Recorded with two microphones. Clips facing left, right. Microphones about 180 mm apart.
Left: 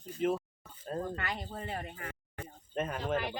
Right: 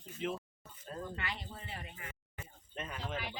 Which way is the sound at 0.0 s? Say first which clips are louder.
Left 8 dB; 45° left (ahead or behind).